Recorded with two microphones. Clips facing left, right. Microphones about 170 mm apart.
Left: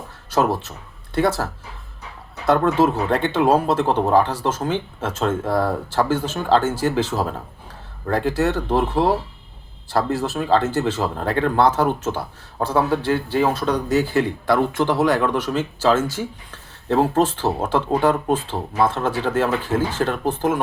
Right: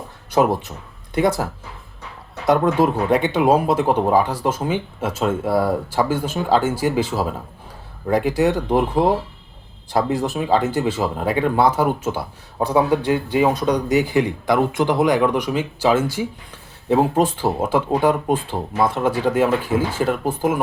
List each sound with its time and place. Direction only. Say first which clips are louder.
0.3 s speech: right 2 dB; 15° right (ahead or behind)
2.5 s speech: even; 15° right (ahead or behind)